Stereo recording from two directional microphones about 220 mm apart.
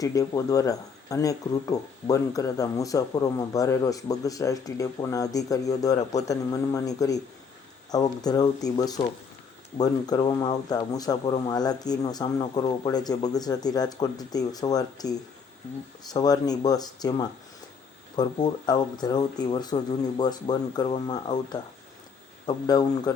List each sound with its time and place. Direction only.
0.0 s speech: 15° left (ahead or behind)